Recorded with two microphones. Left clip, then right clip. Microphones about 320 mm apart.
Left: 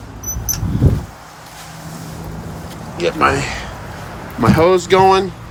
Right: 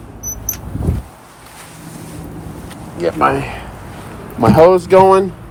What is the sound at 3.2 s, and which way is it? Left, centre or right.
Speech, centre.